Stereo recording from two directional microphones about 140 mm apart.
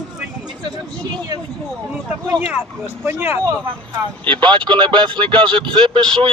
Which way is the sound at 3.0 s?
15° right (ahead or behind).